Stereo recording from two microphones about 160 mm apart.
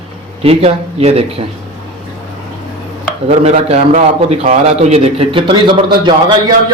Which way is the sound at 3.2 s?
40° right (ahead or behind).